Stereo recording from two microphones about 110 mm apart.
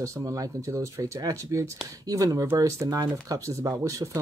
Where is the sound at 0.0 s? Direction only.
30° right (ahead or behind).